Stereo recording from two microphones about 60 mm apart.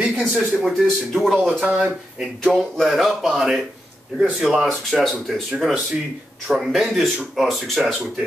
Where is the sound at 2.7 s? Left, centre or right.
Centre.